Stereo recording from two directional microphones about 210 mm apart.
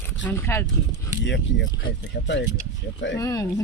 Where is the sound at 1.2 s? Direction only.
55° left (ahead or behind).